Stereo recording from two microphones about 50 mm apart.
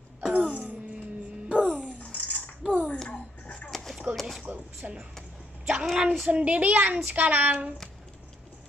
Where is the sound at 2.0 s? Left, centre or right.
Left.